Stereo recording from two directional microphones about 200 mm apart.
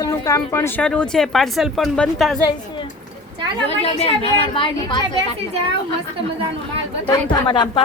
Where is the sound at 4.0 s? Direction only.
30° left (ahead or behind).